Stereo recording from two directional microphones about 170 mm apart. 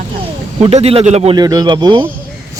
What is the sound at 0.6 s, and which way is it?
Speech, 35° right (ahead or behind).